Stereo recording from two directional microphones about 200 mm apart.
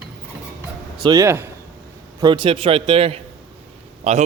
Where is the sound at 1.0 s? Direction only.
15° right (ahead or behind).